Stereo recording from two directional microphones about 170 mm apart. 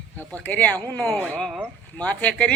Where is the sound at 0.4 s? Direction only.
10° left (ahead or behind).